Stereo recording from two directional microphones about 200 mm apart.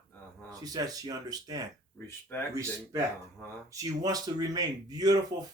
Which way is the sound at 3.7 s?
20° right (ahead or behind).